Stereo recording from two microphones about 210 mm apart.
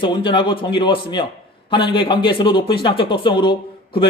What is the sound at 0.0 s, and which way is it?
Speech, 25° left (ahead or behind).